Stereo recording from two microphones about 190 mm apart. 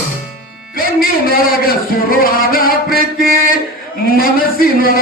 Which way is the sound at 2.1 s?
50° left (ahead or behind).